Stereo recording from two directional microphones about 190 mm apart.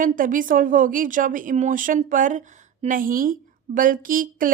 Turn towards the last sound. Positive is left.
turn(degrees=-45)  # may be behind; listen again after turning